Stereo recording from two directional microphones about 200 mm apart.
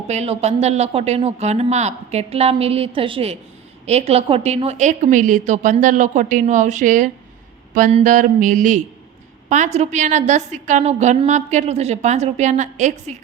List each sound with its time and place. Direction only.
0.1 s a woman's voice: 35° right (ahead or behind)